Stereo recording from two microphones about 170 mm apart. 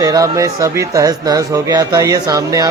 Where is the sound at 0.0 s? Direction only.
20° right (ahead or behind).